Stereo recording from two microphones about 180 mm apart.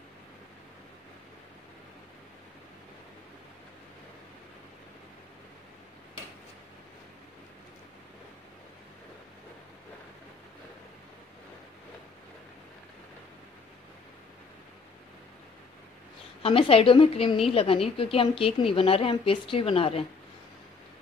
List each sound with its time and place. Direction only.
16.4 s a woman's voice: 30° left (ahead or behind)